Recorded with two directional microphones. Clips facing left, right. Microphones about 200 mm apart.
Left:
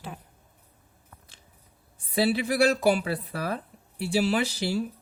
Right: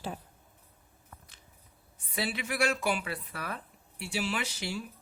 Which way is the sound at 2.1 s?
35° left (ahead or behind).